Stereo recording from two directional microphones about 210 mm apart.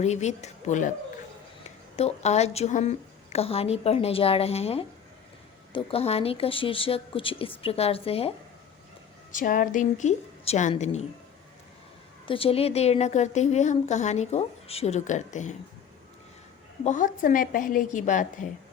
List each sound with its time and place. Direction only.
0.0 s a woman's voice: 35° left (ahead or behind)
2.0 s a woman's voice: 30° left (ahead or behind)
9.3 s a woman's voice: 40° left (ahead or behind)
12.3 s a woman's voice: 25° left (ahead or behind)
16.8 s a woman's voice: 35° left (ahead or behind)